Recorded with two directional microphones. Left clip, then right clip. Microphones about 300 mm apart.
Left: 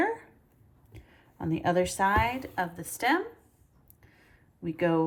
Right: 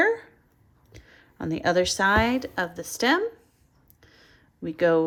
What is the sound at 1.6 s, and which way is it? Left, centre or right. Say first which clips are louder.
Speech: right 4 dB; centre.